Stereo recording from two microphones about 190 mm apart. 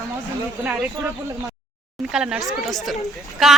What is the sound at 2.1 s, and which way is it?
Speech, 5° right (ahead or behind).